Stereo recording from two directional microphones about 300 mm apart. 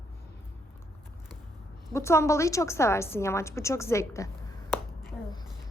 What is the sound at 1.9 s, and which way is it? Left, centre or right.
A woman's voice, centre.